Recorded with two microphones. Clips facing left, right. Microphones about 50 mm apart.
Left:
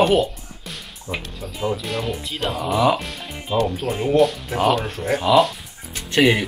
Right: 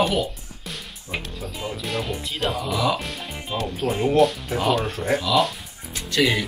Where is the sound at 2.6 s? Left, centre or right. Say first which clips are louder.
Left 7 dB; left.